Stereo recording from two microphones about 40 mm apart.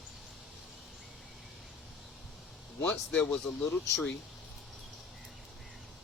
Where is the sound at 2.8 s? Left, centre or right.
Left.